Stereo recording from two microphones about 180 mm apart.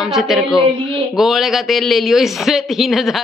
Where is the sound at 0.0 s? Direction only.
Centre (ahead or behind).